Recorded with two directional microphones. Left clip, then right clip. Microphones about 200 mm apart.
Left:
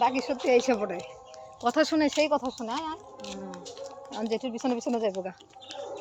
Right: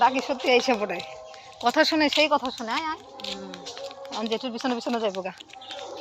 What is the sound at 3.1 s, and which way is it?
Music, 30° left (ahead or behind).